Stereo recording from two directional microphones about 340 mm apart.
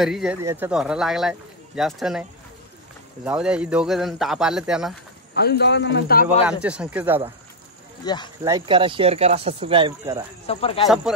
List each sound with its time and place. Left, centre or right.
0.0 s speech: centre
3.3 s speech: centre
5.3 s a man's voice: left
6.4 s speech: centre
8.0 s speech: centre
8.5 s speech: centre
10.4 s speech: centre
11.1 s speech: centre